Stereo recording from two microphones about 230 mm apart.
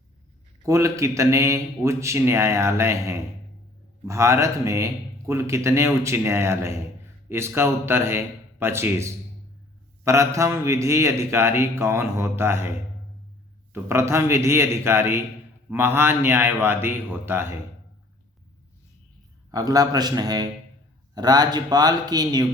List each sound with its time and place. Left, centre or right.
0.6 s speech: centre
13.8 s speech: centre
19.5 s speech: centre